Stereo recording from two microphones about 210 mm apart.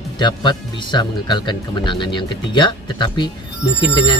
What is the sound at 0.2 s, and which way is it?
Speech, 20° left (ahead or behind).